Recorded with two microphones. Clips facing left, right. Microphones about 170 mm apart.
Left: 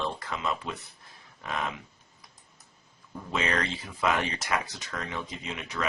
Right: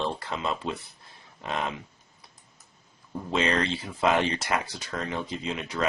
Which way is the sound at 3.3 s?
30° right (ahead or behind).